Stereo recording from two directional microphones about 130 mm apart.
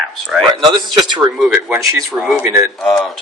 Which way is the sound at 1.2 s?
30° right (ahead or behind).